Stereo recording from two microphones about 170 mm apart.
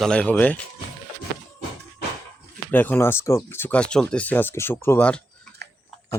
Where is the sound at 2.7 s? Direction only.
10° left (ahead or behind).